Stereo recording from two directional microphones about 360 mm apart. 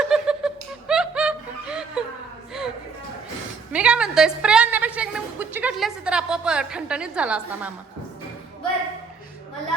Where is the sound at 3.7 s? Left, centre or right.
Centre.